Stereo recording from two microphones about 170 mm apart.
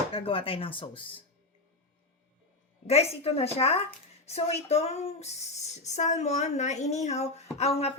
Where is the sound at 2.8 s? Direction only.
35° left (ahead or behind).